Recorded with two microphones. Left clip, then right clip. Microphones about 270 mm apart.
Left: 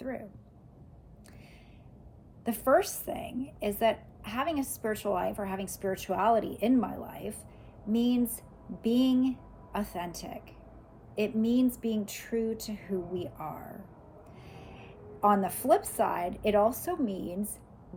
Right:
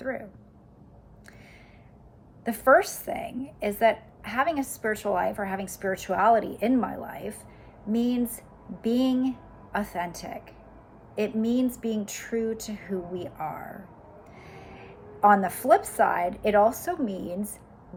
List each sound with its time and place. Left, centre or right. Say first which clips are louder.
2.4 s a woman's voice: right 6 dB; centre